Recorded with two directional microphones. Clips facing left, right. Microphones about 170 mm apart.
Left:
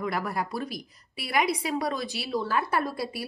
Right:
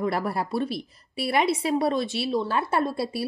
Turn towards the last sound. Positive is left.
turn(degrees=-25)  # may be behind; listen again after turning